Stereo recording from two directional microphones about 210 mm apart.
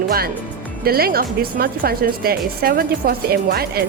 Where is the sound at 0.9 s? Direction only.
45° right (ahead or behind).